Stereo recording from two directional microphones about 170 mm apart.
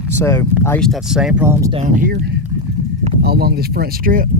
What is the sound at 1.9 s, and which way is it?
Speech, 55° right (ahead or behind).